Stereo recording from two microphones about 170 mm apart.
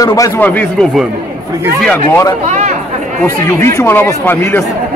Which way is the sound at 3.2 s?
15° left (ahead or behind).